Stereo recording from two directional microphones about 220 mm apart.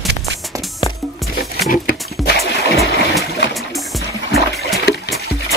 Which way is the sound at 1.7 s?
40° left (ahead or behind).